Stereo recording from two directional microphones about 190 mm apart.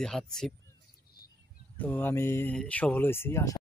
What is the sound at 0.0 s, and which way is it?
Speech, 5° left (ahead or behind).